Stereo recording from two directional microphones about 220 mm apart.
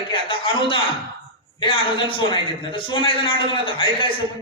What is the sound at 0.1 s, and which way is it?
A man's voice, 25° left (ahead or behind).